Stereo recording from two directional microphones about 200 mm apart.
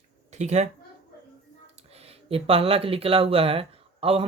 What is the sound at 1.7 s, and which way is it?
Speech, 30° right (ahead or behind).